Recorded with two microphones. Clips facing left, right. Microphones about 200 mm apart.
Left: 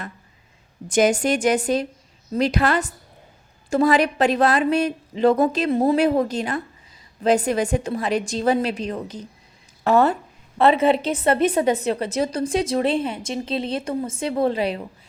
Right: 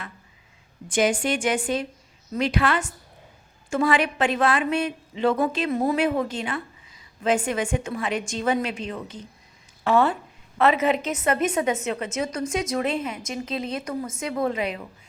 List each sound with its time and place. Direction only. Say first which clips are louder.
0.9 s a woman's voice: left 4 dB; 40° left (ahead or behind)
10.6 s a woman's voice: left 4 dB; 30° left (ahead or behind)